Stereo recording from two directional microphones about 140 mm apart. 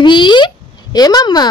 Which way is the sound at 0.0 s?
35° left (ahead or behind).